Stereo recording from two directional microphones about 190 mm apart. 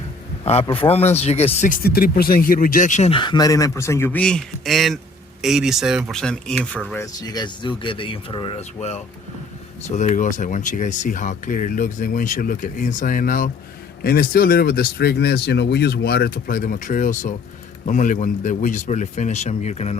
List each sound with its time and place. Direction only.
0.4 s speech: 30° left (ahead or behind); by 6.6 s 5° left (ahead or behind)
6.7 s speech: 15° left (ahead or behind); by 20.0 s 35° left (ahead or behind)